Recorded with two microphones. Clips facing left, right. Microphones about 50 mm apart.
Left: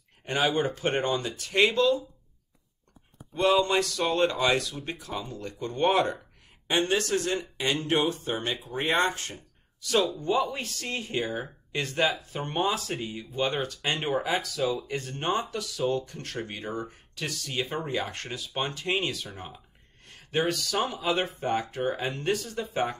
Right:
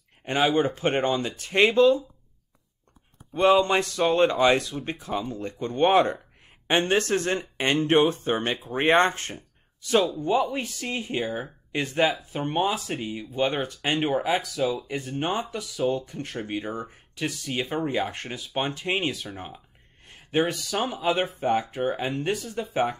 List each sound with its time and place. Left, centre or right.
0.4 s speech: centre
0.7 s speech: right
3.6 s speech: right
10.2 s speech: centre
14.0 s speech: centre